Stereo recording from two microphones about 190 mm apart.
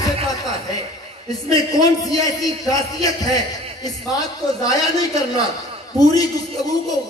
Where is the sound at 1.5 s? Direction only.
20° left (ahead or behind).